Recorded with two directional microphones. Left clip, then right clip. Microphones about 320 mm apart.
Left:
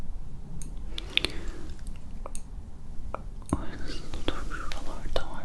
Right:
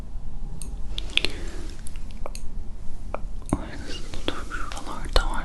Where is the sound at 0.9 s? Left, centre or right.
Centre.